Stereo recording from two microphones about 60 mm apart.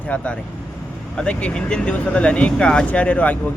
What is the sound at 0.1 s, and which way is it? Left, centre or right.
Speech, left.